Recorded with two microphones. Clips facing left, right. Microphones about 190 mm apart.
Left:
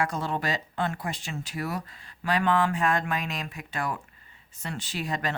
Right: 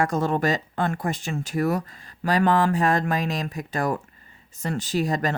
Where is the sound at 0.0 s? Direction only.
45° right (ahead or behind).